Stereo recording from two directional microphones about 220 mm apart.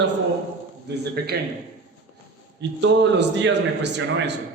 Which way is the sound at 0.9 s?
50° right (ahead or behind).